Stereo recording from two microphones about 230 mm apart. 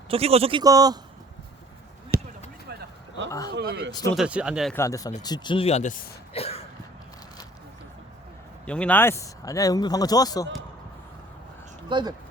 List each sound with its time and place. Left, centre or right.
0.1 s speech: right
2.1 s basketball bounce: right
3.5 s speech: right
4.1 s speech: centre
4.7 s speech: centre
8.6 s speech: centre
11.9 s speech: centre